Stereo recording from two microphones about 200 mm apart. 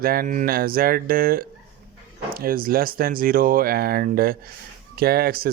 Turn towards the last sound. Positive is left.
turn(degrees=-50)  # may be behind; listen again after turning